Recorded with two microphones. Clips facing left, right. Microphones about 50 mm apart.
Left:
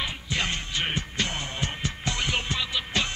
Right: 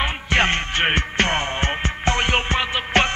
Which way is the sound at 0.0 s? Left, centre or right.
Right.